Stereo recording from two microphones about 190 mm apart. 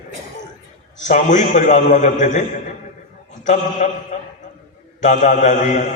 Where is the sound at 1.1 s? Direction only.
40° left (ahead or behind).